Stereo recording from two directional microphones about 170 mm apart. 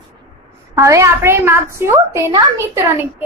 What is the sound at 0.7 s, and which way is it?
A child's voice, 15° right (ahead or behind).